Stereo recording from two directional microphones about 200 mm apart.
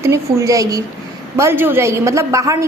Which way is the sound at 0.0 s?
15° right (ahead or behind).